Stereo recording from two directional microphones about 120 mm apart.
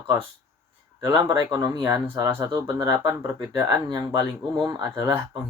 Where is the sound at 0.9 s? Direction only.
25° right (ahead or behind).